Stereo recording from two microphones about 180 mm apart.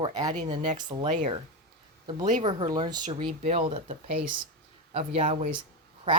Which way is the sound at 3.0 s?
40° right (ahead or behind).